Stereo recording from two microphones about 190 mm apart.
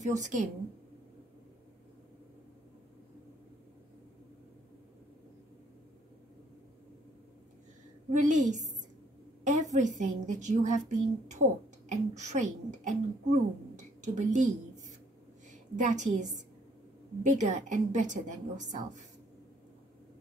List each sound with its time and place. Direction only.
0.0 s a woman's voice: 40° right (ahead or behind)
8.1 s a woman's voice: 40° right (ahead or behind)
15.8 s a woman's voice: 40° right (ahead or behind)